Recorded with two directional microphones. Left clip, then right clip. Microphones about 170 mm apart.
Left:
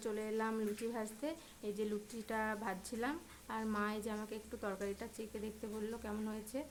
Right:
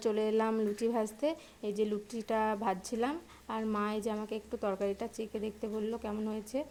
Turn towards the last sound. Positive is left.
turn(degrees=-20)  # may be behind; listen again after turning